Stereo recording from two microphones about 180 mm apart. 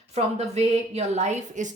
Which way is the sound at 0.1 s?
35° right (ahead or behind).